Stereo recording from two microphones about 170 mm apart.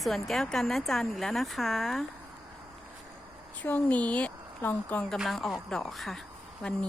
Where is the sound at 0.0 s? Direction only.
Centre (ahead or behind).